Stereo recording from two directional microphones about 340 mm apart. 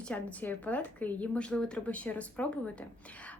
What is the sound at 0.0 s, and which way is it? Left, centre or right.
A woman's voice, centre.